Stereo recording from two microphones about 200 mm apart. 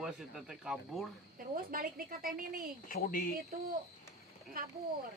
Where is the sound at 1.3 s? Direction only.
45° right (ahead or behind).